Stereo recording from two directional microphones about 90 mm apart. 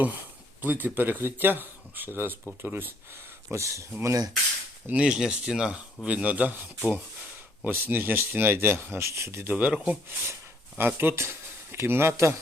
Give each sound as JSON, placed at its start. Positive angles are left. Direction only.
{"t": 0.6, "sound": "speech", "side_deg": -20}
{"t": 3.5, "sound": "speech", "side_deg": -35}
{"t": 4.9, "sound": "speech", "side_deg": -10}
{"t": 9.5, "sound": "speech", "side_deg": -15}
{"t": 10.8, "sound": "speech", "side_deg": -25}